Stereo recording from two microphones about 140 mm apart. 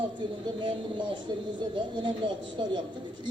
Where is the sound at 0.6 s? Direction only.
35° right (ahead or behind).